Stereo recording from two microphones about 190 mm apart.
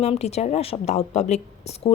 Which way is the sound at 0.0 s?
35° left (ahead or behind).